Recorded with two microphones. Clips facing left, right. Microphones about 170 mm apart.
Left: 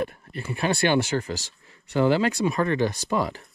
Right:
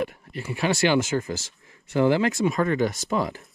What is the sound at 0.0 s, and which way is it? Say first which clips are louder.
Speech: even; 15° right (ahead or behind).